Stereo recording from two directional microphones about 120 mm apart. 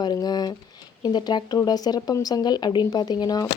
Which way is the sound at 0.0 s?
35° left (ahead or behind).